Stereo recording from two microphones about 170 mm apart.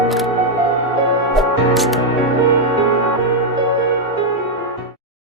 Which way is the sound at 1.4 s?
Centre (ahead or behind).